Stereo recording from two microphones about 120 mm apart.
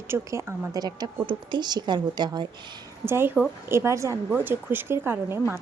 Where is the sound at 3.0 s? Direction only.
20° right (ahead or behind).